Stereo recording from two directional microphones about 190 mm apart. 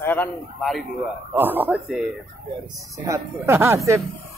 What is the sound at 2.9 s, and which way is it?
Speech, 15° right (ahead or behind).